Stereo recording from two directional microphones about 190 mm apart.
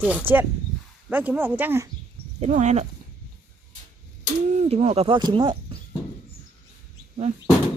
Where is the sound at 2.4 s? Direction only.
40° right (ahead or behind).